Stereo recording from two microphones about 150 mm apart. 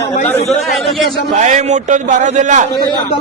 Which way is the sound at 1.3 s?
50° right (ahead or behind).